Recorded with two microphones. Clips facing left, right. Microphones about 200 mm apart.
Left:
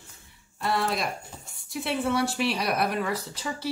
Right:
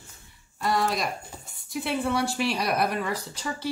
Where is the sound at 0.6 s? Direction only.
Centre (ahead or behind).